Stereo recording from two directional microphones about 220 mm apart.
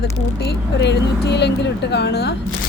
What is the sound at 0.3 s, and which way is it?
Speech, 50° left (ahead or behind).